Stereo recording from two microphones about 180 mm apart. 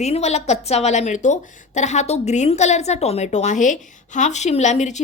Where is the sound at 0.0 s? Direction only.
35° left (ahead or behind).